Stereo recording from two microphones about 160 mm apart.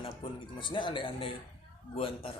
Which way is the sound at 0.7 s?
30° left (ahead or behind).